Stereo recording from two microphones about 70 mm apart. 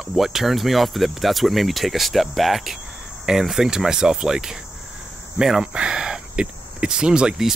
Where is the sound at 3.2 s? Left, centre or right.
Centre.